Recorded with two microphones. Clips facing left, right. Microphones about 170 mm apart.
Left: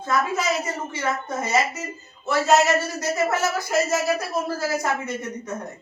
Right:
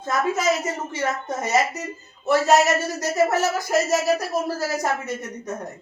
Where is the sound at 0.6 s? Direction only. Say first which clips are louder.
Right 2 dB; 40° right (ahead or behind).